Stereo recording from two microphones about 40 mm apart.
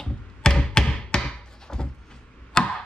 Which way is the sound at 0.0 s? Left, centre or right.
Centre.